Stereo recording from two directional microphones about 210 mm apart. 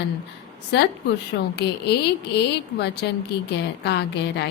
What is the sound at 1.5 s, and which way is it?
Speech, 50° left (ahead or behind).